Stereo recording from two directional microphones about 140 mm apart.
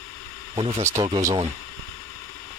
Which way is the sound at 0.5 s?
40° right (ahead or behind).